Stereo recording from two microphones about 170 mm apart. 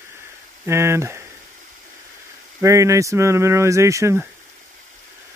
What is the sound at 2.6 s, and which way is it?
Speech, 15° right (ahead or behind).